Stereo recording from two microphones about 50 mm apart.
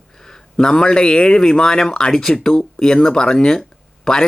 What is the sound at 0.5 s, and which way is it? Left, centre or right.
A man's voice, centre.